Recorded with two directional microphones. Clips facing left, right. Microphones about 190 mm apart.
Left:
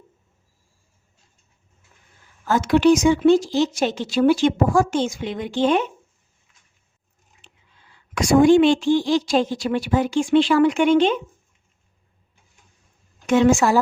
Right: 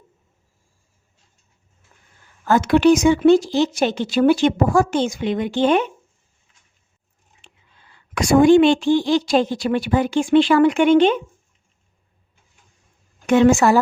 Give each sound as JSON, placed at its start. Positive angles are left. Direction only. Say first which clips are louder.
{"t": 2.4, "sound": "speech", "louder": "right 2 dB", "side_deg": -60}
{"t": 8.1, "sound": "speech", "louder": "right 1 dB", "side_deg": -60}
{"t": 13.2, "sound": "speech", "louder": "right 2 dB", "side_deg": -60}